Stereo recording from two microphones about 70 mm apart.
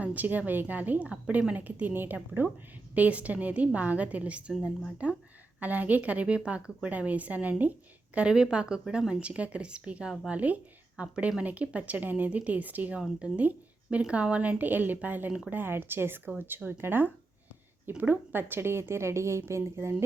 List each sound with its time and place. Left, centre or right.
0.0 s a woman's voice: right
12.9 s a woman's voice: centre; by 20.0 s right